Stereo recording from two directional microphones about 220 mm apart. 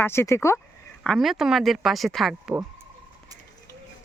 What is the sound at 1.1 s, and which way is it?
Speech, centre (ahead or behind).